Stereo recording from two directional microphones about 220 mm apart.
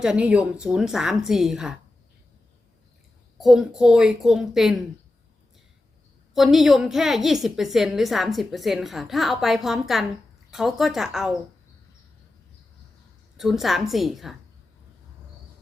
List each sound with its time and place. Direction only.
0.0 s a woman's voice: 5° right (ahead or behind)
3.3 s a woman's voice: centre (ahead or behind)
6.3 s a woman's voice: centre (ahead or behind)
13.3 s a woman's voice: centre (ahead or behind)